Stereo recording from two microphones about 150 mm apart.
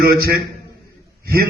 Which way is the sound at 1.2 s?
90° right.